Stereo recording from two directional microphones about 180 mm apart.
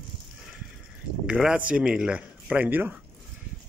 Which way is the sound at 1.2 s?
5° right (ahead or behind).